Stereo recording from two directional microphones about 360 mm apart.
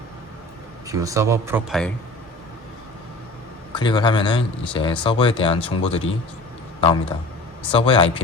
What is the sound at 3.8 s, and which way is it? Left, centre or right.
Speech, centre.